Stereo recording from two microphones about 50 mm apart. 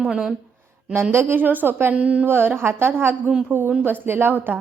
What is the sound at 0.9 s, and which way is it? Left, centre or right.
Speech, right.